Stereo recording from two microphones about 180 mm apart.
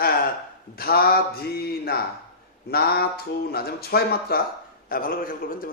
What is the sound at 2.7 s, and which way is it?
A man's voice, 60° left (ahead or behind).